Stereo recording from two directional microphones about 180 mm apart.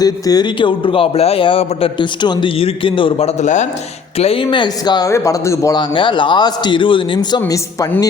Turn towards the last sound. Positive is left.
turn(degrees=20)  # may be behind; listen again after turning